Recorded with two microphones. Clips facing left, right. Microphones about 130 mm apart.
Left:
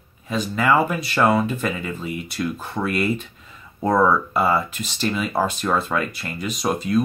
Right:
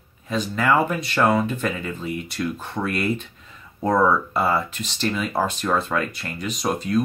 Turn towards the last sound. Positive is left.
turn(degrees=5)  # may be behind; listen again after turning